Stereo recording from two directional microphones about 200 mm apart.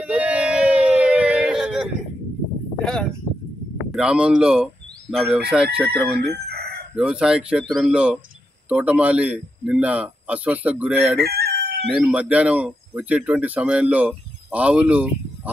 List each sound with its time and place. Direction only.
0.0 s a sound: 5° right (ahead or behind)
3.9 s speech: 5° right (ahead or behind)
6.4 s chicken: 55° right (ahead or behind)
7.0 s a man's voice: 5° right (ahead or behind)
11.1 s crowing: 55° right (ahead or behind)
11.9 s speech: 5° right (ahead or behind)